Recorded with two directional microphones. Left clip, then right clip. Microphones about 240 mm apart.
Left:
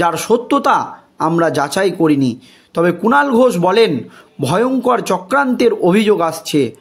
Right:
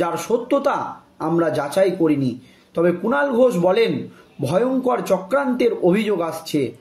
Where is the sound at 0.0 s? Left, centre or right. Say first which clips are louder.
Left 6 dB; left.